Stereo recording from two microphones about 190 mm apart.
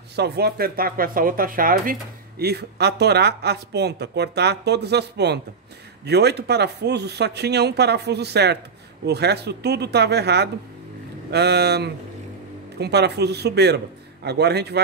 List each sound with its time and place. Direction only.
0.1 s speech: 60° right (ahead or behind)